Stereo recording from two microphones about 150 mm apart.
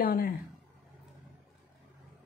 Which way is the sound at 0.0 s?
75° left (ahead or behind).